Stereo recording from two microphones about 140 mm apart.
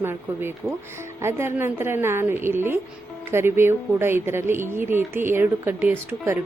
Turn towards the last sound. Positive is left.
turn(degrees=-10)  # may be behind; listen again after turning